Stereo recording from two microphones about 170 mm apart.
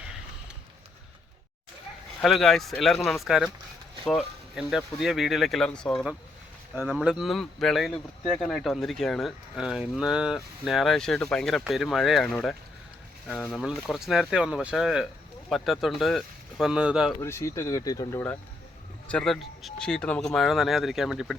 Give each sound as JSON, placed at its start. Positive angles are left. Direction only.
{"t": 2.2, "sound": "speech", "side_deg": 0}
{"t": 17.2, "sound": "speech", "side_deg": 15}